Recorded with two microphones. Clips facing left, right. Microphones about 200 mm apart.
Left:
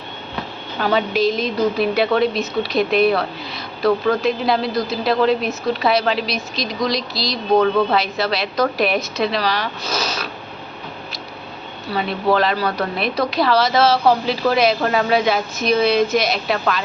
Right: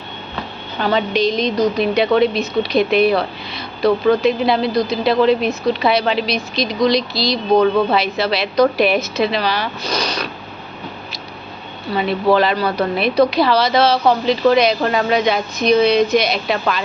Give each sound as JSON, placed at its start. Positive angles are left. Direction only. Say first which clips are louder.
{"t": 0.8, "sound": "speech", "louder": "right 1 dB", "side_deg": 5}
{"t": 11.9, "sound": "speech", "louder": "right 3 dB", "side_deg": 0}